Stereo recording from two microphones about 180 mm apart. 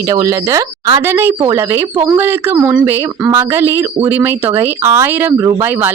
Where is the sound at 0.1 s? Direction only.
20° right (ahead or behind).